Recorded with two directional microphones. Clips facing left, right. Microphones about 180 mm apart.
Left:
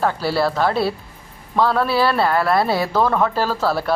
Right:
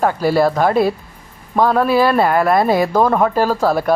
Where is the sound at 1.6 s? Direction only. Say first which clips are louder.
Right 5 dB; 10° right (ahead or behind).